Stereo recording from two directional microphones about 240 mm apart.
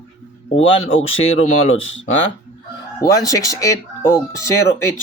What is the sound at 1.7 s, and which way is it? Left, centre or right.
Speech, left.